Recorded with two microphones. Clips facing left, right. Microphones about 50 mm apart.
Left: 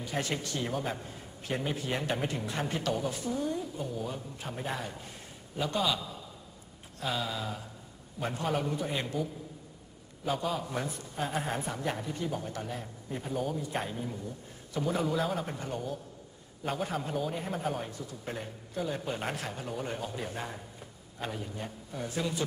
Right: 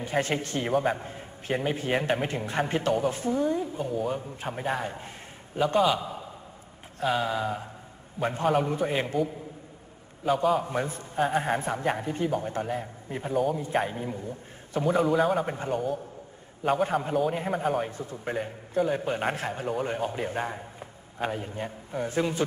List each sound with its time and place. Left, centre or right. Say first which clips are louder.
0.0 s a man's voice: right 6 dB; right
10.2 s a man's voice: right 8 dB; centre
10.6 s a man's voice: right 5 dB; right
11.1 s a man's voice: right 8 dB; right
13.3 s a man's voice: right 8 dB; centre
13.8 s a man's voice: right 4 dB; right
15.0 s a man's voice: right 9 dB; centre
15.4 s a man's voice: right 7 dB; right
16.9 s a man's voice: right 7 dB; centre
17.8 s a man's voice: right 6 dB; right